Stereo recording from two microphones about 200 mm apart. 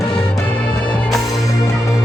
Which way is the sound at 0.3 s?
5° left (ahead or behind).